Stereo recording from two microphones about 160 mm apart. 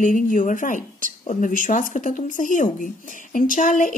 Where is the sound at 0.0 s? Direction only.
55° left (ahead or behind).